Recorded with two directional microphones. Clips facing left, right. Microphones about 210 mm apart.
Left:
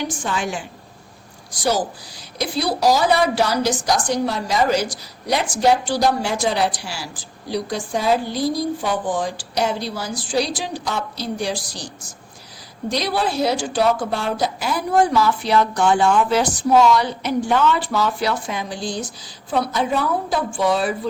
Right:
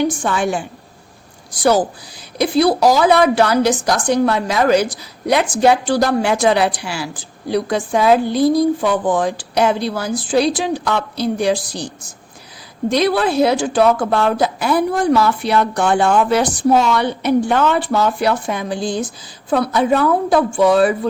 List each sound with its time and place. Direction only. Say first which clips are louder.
0.1 s a woman's voice: right 6 dB; 55° right (ahead or behind)
2.4 s a woman's voice: right 7 dB; 55° right (ahead or behind)
12.9 s a woman's voice: right 6 dB; 55° right (ahead or behind)